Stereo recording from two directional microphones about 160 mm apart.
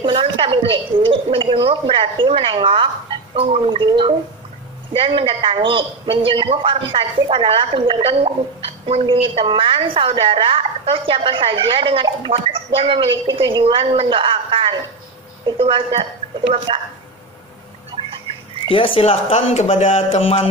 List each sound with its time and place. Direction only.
0.1 s speech: 35° right (ahead or behind)
18.7 s speech: 35° left (ahead or behind)